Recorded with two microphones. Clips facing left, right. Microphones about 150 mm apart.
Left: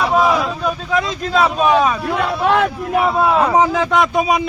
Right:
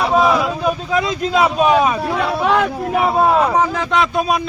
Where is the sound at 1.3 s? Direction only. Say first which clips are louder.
Even; 10° right (ahead or behind).